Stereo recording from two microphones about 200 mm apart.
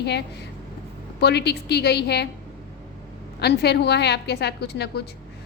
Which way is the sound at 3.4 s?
55° left (ahead or behind).